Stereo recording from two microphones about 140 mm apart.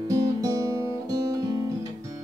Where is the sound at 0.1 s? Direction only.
25° right (ahead or behind).